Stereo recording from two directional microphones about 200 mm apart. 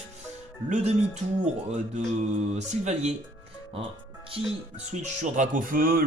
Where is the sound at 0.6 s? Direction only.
35° right (ahead or behind).